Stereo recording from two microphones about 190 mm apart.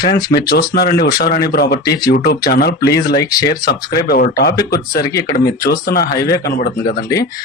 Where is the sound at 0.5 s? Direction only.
55° left (ahead or behind).